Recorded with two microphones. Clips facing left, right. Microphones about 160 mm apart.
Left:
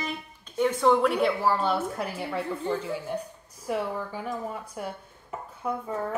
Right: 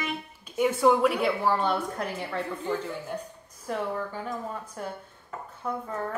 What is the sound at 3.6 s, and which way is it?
A woman's voice, 10° left (ahead or behind).